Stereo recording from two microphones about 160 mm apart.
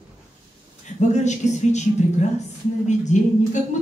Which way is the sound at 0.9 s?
45° left (ahead or behind).